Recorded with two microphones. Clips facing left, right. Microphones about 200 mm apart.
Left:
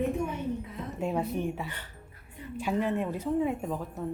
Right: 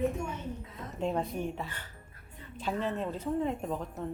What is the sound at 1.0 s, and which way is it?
Speech, 10° left (ahead or behind).